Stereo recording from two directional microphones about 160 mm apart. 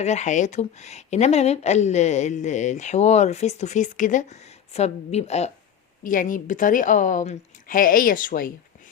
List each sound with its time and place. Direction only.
0.0 s speech: 45° left (ahead or behind)
6.0 s a woman's voice: 55° left (ahead or behind)